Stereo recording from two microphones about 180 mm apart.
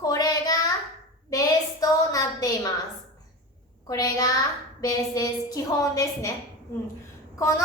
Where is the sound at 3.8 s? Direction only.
20° left (ahead or behind).